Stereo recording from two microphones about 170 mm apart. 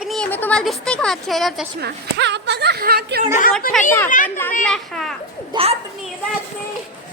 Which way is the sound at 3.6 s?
60° left (ahead or behind).